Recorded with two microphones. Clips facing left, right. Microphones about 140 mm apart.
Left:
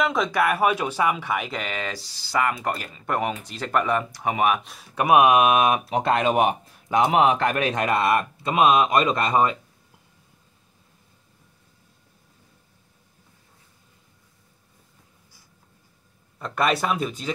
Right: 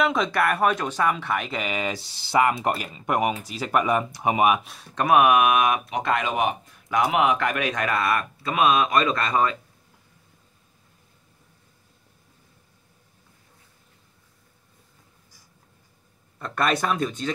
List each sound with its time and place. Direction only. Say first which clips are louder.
0.0 s speech: even; centre (ahead or behind)
1.9 s speech: right 3 dB; 20° right (ahead or behind)
4.9 s speech: left 1 dB; 15° left (ahead or behind)
16.3 s speech: left 1 dB; 5° left (ahead or behind)